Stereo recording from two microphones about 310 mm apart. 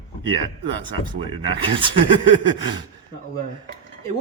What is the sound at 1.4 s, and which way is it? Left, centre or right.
Speech, centre.